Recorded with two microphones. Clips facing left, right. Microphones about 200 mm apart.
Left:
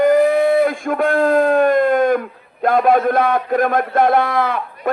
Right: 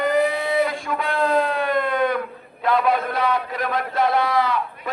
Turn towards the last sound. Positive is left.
turn(degrees=55)  # may be behind; listen again after turning